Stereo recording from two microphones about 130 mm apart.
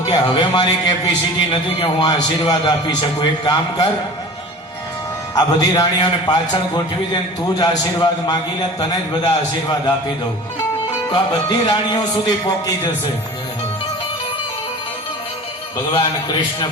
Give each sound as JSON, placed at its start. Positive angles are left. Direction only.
{"t": 0.0, "sound": "a man's voice", "side_deg": 35}
{"t": 5.3, "sound": "a man's voice", "side_deg": 30}
{"t": 11.1, "sound": "a man's voice", "side_deg": 35}